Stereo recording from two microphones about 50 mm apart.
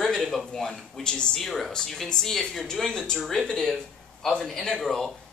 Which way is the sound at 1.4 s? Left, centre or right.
Centre.